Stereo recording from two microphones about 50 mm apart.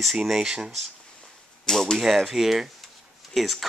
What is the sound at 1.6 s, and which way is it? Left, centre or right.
Speech, centre.